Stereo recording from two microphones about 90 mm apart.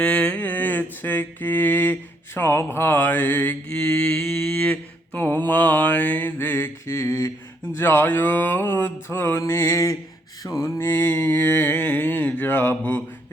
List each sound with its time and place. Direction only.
0.0 s mantra: 15° left (ahead or behind)